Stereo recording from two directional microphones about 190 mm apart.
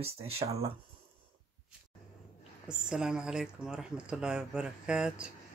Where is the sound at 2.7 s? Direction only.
5° right (ahead or behind).